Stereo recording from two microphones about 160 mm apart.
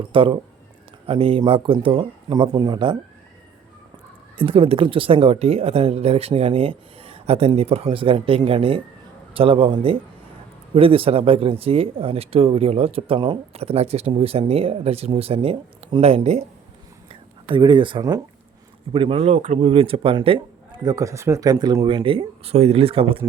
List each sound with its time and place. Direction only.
0.1 s speech: 35° right (ahead or behind)
4.4 s speech: 35° right (ahead or behind)
17.1 s whispering: 30° right (ahead or behind)
18.9 s speech: 35° right (ahead or behind)
20.8 s speech: 20° right (ahead or behind); by 23.2 s 35° right (ahead or behind)